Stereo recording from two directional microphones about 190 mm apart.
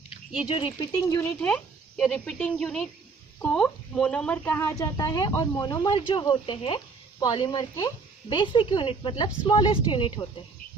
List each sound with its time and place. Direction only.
0.3 s speech: 30° left (ahead or behind)
1.2 s speech: 5° left (ahead or behind); by 10.1 s 25° left (ahead or behind)